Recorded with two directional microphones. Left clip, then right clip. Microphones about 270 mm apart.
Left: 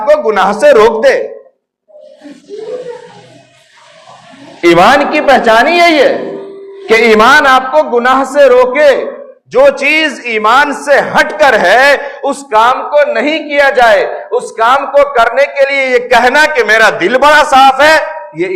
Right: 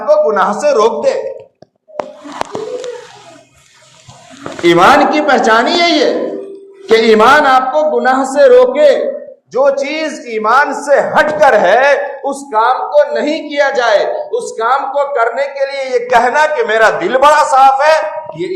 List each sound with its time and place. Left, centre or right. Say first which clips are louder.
0.0 s a man's voice: left 2 dB; left
4.6 s a man's voice: left 1 dB; left